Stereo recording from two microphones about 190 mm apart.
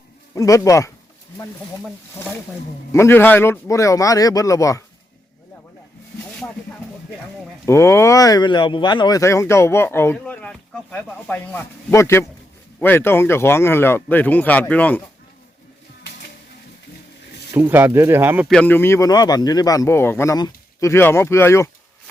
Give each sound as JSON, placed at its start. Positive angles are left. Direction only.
{"t": 0.3, "sound": "speech", "side_deg": 15}
{"t": 2.9, "sound": "speech", "side_deg": 15}
{"t": 7.6, "sound": "speech", "side_deg": 15}
{"t": 17.5, "sound": "speech", "side_deg": -10}
{"t": 18.4, "sound": "speech", "side_deg": 5}